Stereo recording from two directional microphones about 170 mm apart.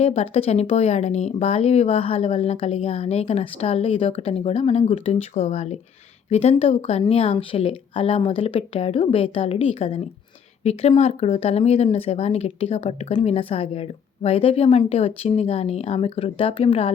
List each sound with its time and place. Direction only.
0.0 s speech: 35° left (ahead or behind)